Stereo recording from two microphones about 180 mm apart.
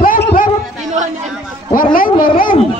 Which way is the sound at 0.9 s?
40° right (ahead or behind).